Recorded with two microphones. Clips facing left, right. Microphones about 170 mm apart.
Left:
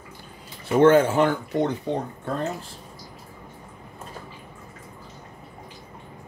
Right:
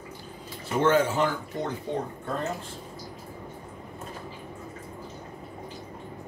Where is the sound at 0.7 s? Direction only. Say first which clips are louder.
Left 6 dB; 55° left (ahead or behind).